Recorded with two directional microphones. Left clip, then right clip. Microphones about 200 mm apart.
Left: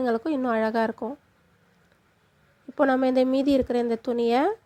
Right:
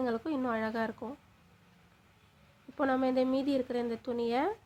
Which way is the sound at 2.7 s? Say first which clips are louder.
Left 8 dB; 35° left (ahead or behind).